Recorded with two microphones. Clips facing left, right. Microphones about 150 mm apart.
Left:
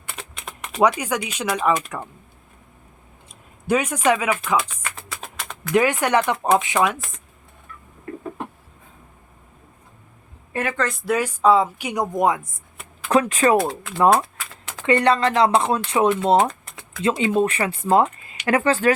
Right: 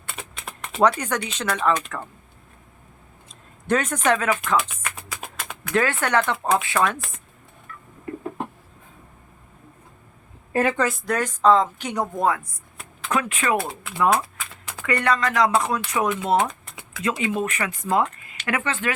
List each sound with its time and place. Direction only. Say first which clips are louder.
0.1 s a sound: even; 5° right (ahead or behind)
0.8 s a woman's voice: left 1 dB; 10° left (ahead or behind)
3.7 s a woman's voice: left 2 dB; 10° left (ahead or behind)
4.5 s a sound: left 1 dB; 10° right (ahead or behind)
5.7 s a woman's voice: left 3 dB; 15° left (ahead or behind)
10.5 s a woman's voice: right 4 dB; 35° right (ahead or behind)
10.8 s a woman's voice: left 1 dB; centre (ahead or behind); by 12.5 s 20° left (ahead or behind)
13.1 s speech: left 6 dB; 35° left (ahead or behind)
13.6 s speech: left 7 dB; 5° right (ahead or behind)
14.8 s speech: left 5 dB; 25° left (ahead or behind)